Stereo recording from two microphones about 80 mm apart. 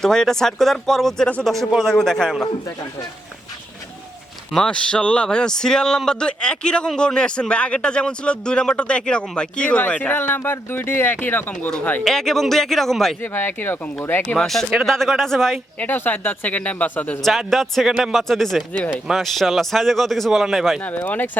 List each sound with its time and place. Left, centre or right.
0.0 s a man's voice: centre
4.5 s speech: centre
12.0 s a man's voice: centre
13.2 s speech: left
14.3 s a man's voice: centre
15.8 s speech: left
17.2 s a man's voice: centre
20.8 s speech: centre